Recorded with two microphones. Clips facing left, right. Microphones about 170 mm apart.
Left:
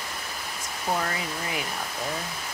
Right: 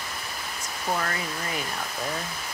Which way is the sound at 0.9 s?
15° left (ahead or behind).